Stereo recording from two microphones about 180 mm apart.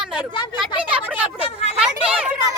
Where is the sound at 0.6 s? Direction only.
5° right (ahead or behind).